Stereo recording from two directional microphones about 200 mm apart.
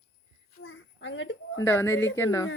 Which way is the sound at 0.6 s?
65° left (ahead or behind).